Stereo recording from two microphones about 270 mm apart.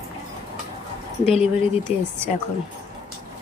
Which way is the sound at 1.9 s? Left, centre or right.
Centre.